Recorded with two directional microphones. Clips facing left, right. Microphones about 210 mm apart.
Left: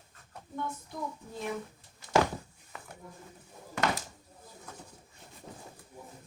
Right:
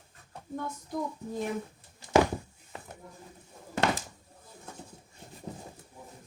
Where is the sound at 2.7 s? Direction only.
30° right (ahead or behind).